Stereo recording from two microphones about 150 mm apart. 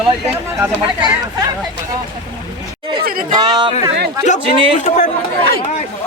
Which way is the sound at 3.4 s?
30° right (ahead or behind).